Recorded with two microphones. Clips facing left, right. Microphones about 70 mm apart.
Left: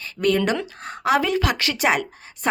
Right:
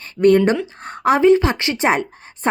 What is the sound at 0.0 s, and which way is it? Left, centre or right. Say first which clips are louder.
A woman's voice: right 7 dB; right.